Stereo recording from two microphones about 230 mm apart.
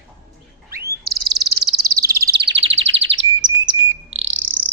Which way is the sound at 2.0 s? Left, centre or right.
Right.